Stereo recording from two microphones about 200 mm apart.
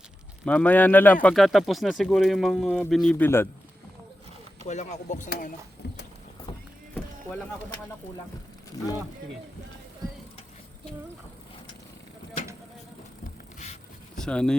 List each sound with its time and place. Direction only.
0.4 s speech: 10° left (ahead or behind)
4.6 s speech: 35° left (ahead or behind)
5.8 s a sound: 55° left (ahead or behind)
14.2 s speech: 5° left (ahead or behind)